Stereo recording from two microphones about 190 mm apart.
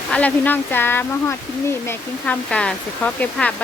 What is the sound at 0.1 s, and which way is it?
Speech, 5° left (ahead or behind).